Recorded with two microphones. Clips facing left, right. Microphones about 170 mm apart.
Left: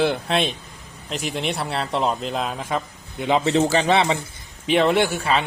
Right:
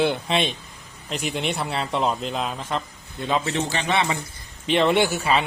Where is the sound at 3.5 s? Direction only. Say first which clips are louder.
Left 6 dB; 40° left (ahead or behind).